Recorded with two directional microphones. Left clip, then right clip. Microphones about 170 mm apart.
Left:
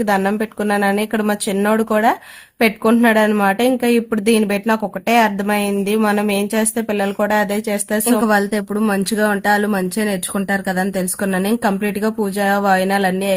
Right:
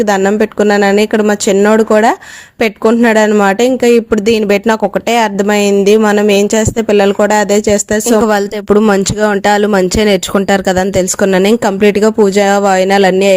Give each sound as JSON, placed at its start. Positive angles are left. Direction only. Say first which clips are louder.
{"t": 0.0, "sound": "speech", "louder": "right 7 dB", "side_deg": -40}
{"t": 8.2, "sound": "speech", "louder": "right 5 dB", "side_deg": -55}